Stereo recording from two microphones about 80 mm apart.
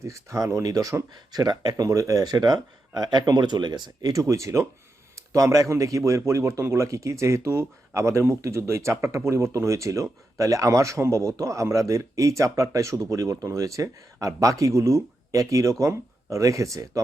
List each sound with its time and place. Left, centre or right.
0.0 s speech: right
4.1 s speech: right